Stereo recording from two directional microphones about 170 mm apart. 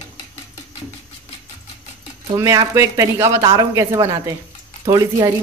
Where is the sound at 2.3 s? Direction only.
20° right (ahead or behind).